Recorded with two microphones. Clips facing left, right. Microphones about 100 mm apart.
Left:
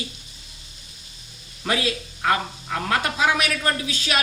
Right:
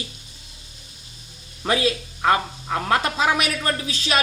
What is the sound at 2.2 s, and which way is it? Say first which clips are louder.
Speech: right 3 dB; 30° right (ahead or behind).